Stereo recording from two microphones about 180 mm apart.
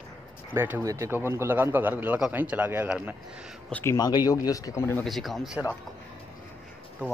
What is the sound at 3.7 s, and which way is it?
Speech, 15° left (ahead or behind).